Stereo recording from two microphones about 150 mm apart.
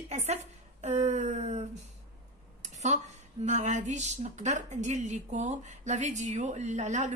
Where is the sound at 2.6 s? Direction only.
50° right (ahead or behind).